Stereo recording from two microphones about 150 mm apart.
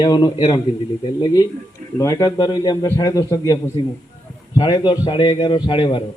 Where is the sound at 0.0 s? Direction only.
25° left (ahead or behind).